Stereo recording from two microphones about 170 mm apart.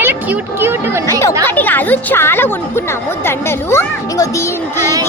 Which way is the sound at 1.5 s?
10° left (ahead or behind).